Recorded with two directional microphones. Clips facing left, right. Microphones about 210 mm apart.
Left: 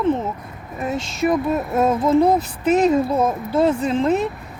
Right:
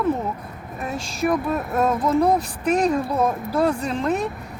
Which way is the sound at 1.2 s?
25° left (ahead or behind).